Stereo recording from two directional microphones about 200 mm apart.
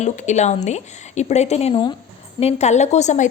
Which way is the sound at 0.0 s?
35° left (ahead or behind).